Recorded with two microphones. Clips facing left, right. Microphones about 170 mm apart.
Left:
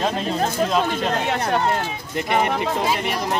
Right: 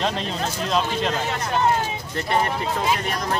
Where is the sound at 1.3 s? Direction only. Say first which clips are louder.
Left 4 dB; 60° left (ahead or behind).